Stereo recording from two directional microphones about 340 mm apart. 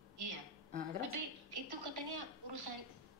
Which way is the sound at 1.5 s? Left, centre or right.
Right.